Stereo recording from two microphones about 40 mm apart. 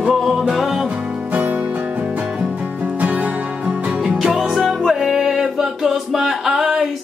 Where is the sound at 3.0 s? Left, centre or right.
Right.